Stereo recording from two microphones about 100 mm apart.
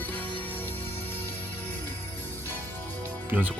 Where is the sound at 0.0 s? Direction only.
15° left (ahead or behind).